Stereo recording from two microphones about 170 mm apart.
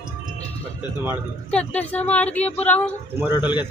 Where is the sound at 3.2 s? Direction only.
10° right (ahead or behind).